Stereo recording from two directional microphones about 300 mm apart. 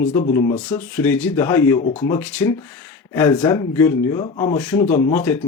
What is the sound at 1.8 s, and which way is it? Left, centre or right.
Speech, centre.